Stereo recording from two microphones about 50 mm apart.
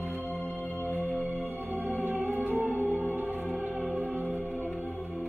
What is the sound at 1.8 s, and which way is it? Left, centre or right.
Music, right.